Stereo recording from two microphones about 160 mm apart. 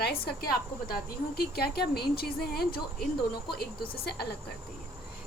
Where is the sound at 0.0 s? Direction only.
75° left (ahead or behind).